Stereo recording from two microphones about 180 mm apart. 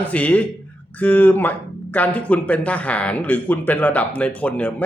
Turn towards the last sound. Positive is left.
turn(degrees=5)  # may be behind; listen again after turning